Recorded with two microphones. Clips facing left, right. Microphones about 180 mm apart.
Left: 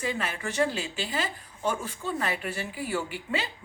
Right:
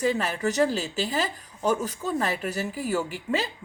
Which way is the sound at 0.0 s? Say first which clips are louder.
Right 7 dB; 40° right (ahead or behind).